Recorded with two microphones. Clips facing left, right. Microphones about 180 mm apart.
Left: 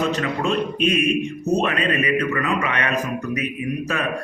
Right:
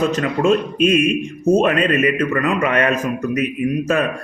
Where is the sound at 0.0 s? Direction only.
45° right (ahead or behind).